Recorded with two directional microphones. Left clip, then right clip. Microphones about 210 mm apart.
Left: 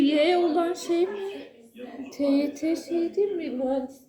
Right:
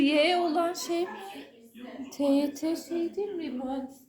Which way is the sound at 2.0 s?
55° right (ahead or behind).